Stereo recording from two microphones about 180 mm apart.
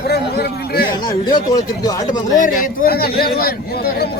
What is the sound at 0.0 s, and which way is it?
Speech, 65° left (ahead or behind).